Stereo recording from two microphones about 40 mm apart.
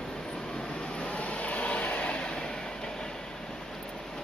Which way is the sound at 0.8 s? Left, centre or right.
Left.